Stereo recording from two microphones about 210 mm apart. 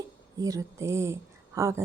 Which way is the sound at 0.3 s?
15° right (ahead or behind).